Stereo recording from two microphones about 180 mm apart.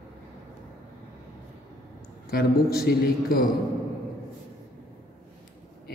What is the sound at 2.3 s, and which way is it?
A man's voice, 60° left (ahead or behind).